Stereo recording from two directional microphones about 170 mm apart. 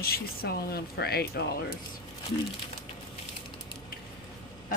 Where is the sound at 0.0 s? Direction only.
60° left (ahead or behind).